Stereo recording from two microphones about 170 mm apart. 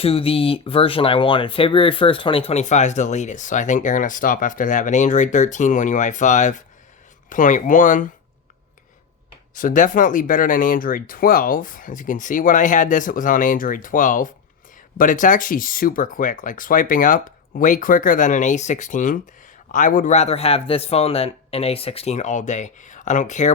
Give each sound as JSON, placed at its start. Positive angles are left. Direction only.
{"t": 0.0, "sound": "speech", "side_deg": 35}
{"t": 9.6, "sound": "a man's voice", "side_deg": 50}